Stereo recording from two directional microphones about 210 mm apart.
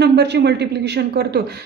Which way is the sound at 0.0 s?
50° right (ahead or behind).